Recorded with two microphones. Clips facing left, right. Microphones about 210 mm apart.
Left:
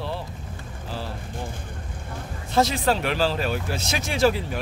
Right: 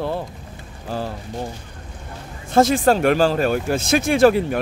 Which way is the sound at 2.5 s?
50° right (ahead or behind).